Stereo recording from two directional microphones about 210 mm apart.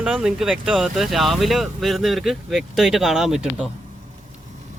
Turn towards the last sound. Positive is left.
turn(degrees=0)  # may be behind; listen again after turning